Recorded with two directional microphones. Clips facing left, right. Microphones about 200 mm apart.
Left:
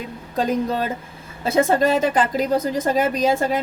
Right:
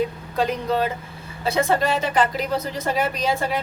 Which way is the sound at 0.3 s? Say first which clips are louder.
Left 1 dB; 45° left (ahead or behind).